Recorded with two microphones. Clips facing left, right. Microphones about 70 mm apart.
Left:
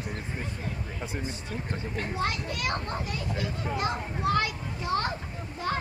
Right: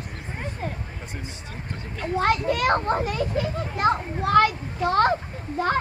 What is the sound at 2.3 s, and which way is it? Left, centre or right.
A child's voice, right.